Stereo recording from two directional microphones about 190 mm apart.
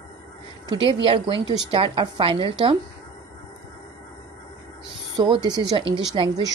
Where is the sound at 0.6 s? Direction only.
30° right (ahead or behind).